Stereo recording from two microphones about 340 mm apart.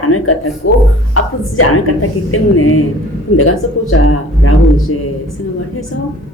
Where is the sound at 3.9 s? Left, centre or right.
Left.